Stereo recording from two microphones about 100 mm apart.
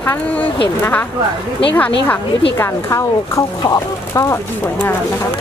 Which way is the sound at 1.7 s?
15° left (ahead or behind).